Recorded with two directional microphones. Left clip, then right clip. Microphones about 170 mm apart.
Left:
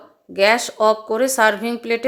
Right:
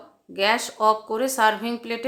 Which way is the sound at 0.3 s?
25° left (ahead or behind).